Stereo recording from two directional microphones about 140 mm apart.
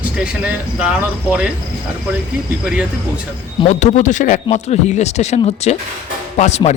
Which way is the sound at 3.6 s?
60° left (ahead or behind).